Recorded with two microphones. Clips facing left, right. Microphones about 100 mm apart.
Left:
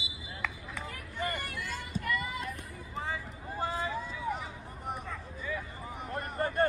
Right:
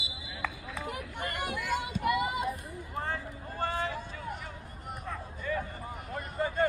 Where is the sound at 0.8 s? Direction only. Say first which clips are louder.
Left 1 dB; 65° right (ahead or behind).